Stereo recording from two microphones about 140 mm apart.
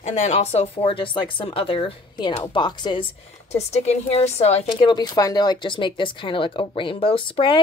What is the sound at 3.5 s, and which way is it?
A woman's voice, 50° left (ahead or behind).